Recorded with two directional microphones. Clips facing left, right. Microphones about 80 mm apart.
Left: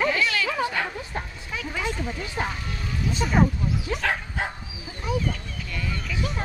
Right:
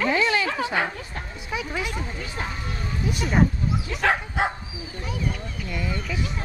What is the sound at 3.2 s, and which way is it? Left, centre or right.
Speech, centre.